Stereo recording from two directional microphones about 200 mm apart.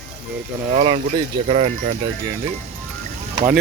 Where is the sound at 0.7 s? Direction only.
30° right (ahead or behind).